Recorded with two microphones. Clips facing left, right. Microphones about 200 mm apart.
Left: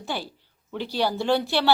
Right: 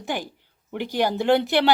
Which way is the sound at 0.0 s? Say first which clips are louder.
Right 3 dB; 15° right (ahead or behind).